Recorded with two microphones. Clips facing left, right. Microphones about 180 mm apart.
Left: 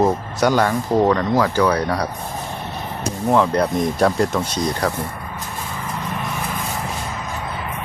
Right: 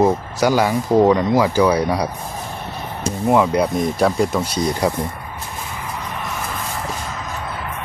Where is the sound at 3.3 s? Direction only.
10° right (ahead or behind).